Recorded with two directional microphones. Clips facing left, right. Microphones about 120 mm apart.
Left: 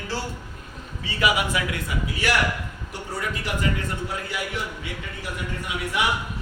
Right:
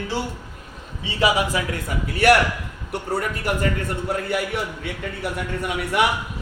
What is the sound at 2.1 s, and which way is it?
A man's voice, 60° right (ahead or behind).